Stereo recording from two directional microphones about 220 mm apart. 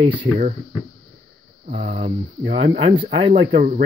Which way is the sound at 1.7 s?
35° right (ahead or behind).